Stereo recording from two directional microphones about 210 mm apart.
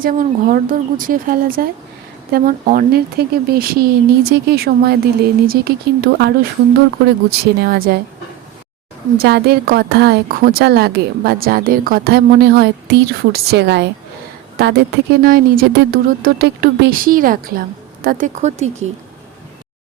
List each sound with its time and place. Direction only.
0.0 s a woman's voice: 45° right (ahead or behind)
9.1 s a woman's voice: 50° right (ahead or behind)
15.2 s a woman's voice: 45° right (ahead or behind)